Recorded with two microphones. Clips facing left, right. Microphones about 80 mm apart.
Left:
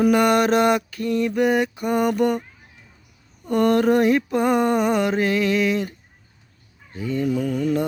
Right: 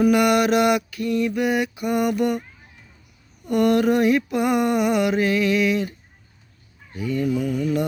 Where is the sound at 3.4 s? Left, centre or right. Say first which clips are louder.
Left 1 dB; left.